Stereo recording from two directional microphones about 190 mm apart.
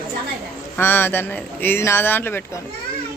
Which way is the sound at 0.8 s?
10° left (ahead or behind).